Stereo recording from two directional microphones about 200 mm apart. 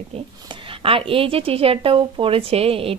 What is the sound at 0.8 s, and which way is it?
A woman's voice, 25° right (ahead or behind).